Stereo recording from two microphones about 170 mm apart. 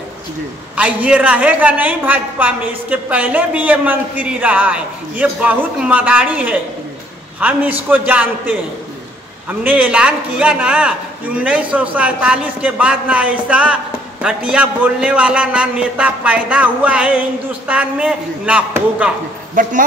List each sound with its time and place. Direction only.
0.7 s a woman's voice: 5° right (ahead or behind)
19.6 s a man's voice: 55° right (ahead or behind)